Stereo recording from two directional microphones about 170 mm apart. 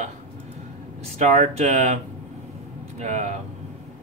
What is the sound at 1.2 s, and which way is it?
Speech, 40° right (ahead or behind).